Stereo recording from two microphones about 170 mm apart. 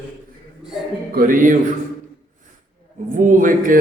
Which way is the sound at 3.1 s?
50° right (ahead or behind).